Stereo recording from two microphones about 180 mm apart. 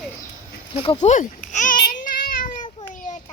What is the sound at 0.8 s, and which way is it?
Babbling, 35° left (ahead or behind).